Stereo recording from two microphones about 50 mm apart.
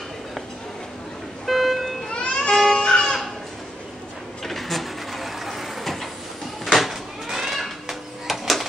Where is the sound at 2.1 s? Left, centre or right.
Left.